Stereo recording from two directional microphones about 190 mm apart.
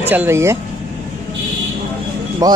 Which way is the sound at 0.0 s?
10° right (ahead or behind).